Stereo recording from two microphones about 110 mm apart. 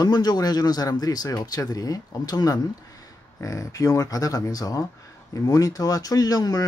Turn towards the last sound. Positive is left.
turn(degrees=35)  # may be behind; listen again after turning